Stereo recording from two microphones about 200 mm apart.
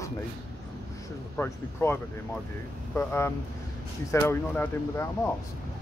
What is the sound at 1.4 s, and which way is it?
Speech, 10° left (ahead or behind).